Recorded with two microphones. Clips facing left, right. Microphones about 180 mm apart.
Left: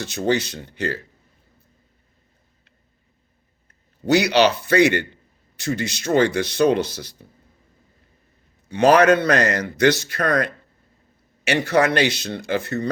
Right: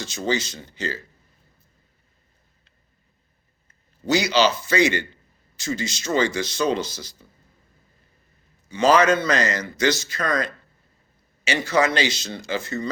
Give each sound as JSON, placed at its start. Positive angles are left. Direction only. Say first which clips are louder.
{"t": 0.0, "sound": "a man's voice", "louder": "left 4 dB", "side_deg": 60}
{"t": 3.7, "sound": "a man's voice", "louder": "left 4 dB", "side_deg": 60}
{"t": 8.7, "sound": "a man's voice", "louder": "left 3 dB", "side_deg": 60}